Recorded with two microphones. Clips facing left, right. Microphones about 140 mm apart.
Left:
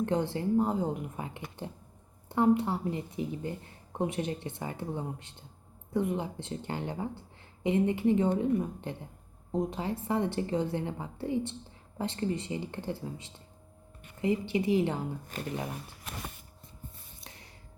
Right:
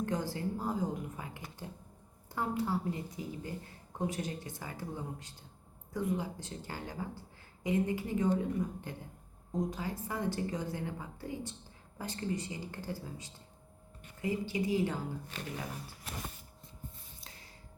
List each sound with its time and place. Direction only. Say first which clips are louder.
0.0 s speech: left 5 dB; 25° left (ahead or behind)
15.3 s speech: left 6 dB; 45° left (ahead or behind)